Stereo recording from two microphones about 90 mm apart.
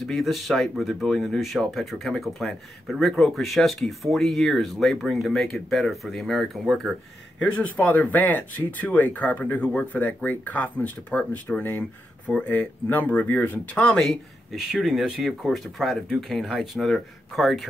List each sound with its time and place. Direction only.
0.0 s speech: centre (ahead or behind)
7.8 s speech: 20° left (ahead or behind); by 17.6 s centre (ahead or behind)